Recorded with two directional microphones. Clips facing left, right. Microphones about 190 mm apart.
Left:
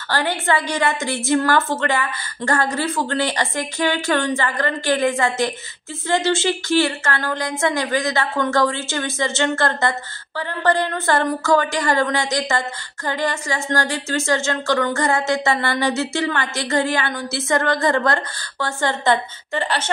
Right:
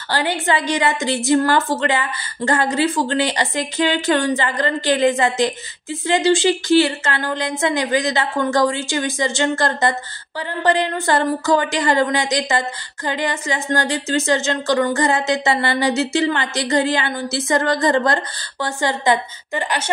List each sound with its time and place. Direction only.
0.1 s a woman's voice: 15° right (ahead or behind)